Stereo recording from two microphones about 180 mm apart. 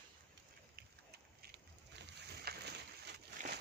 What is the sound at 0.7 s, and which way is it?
Run, 60° right (ahead or behind).